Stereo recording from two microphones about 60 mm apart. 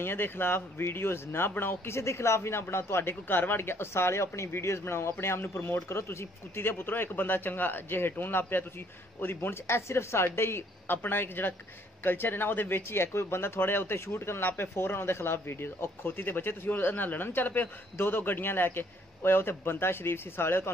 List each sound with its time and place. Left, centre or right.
0.0 s speech: left